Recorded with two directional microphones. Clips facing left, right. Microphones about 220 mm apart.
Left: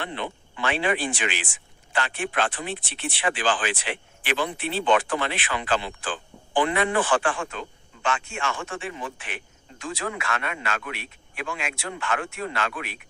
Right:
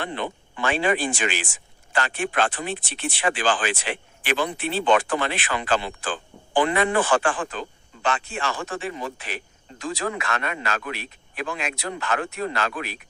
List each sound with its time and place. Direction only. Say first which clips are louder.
0.0 s speech: right 3 dB; 45° right (ahead or behind)